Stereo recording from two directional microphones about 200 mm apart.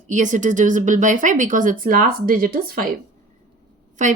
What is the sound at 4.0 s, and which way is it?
Speech, 40° right (ahead or behind).